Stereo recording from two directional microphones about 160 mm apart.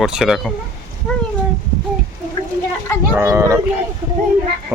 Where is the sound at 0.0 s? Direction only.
5° right (ahead or behind).